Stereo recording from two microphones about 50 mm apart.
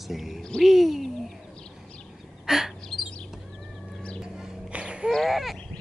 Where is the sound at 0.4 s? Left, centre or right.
Centre.